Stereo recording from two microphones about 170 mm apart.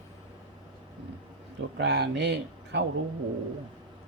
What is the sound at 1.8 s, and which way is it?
Speech, 80° right.